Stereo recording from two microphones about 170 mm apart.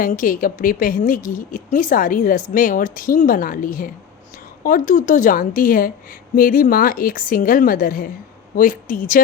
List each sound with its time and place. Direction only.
0.0 s a woman's voice: 55° left (ahead or behind)